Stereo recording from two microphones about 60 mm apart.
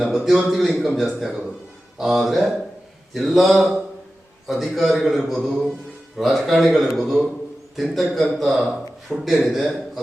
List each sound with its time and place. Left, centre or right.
0.3 s a man's voice: centre